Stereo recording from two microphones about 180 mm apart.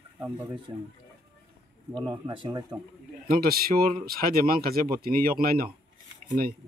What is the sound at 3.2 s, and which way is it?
Speech, 55° right (ahead or behind).